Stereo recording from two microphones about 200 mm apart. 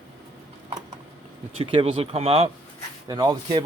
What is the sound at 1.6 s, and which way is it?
Speech, 25° right (ahead or behind).